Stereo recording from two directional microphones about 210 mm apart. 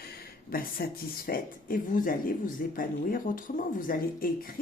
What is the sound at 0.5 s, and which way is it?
Speech, 45° left (ahead or behind).